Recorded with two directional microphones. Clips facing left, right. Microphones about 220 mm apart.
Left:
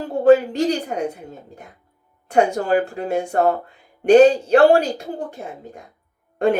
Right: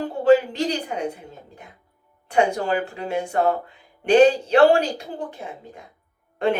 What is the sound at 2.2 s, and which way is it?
A woman's voice, 45° left (ahead or behind).